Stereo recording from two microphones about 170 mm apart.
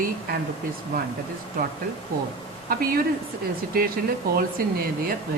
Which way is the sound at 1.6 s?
55° right (ahead or behind).